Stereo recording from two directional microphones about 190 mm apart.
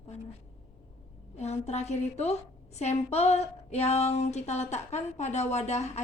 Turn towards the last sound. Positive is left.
turn(degrees=35)  # may be behind; listen again after turning